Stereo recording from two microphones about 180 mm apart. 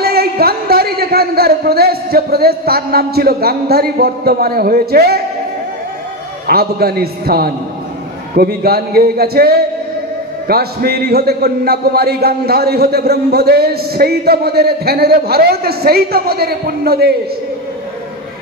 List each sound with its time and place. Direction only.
0.0 s a man's voice: 60° right (ahead or behind)
6.4 s a man's voice: 60° right (ahead or behind)